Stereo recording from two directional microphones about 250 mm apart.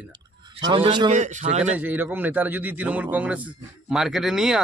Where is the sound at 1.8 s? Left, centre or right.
Centre.